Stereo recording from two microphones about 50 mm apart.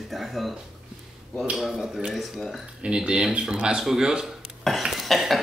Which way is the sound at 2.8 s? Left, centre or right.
Centre.